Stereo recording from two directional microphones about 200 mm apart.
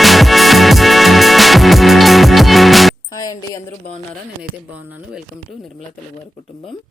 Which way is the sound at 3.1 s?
20° left (ahead or behind).